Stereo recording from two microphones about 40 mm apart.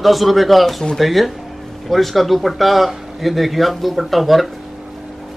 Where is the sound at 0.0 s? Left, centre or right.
Centre.